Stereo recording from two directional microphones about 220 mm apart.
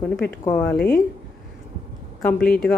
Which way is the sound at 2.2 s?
5° left (ahead or behind).